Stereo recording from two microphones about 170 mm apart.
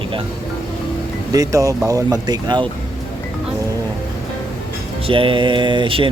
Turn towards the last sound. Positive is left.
turn(degrees=-30)  # may be behind; listen again after turning